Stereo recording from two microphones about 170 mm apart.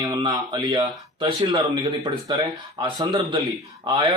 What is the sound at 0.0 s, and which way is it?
Speech, 25° right (ahead or behind).